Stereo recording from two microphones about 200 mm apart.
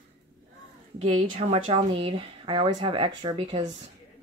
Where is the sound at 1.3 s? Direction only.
30° right (ahead or behind).